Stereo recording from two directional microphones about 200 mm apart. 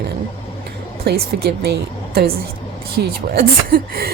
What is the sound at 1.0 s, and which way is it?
A woman's voice, 50° right (ahead or behind).